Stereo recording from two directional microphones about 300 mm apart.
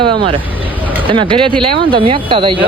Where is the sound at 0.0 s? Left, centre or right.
Centre.